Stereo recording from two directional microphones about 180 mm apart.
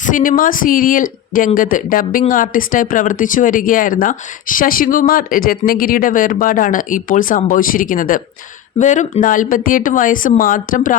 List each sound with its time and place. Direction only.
0.0 s speech: 50° left (ahead or behind)